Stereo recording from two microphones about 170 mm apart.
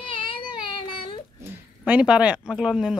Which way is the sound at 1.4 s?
10° right (ahead or behind).